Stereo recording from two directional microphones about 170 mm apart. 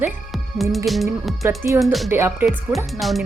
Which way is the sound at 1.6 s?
10° right (ahead or behind).